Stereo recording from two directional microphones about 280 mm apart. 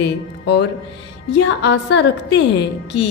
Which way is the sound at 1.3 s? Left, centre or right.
Left.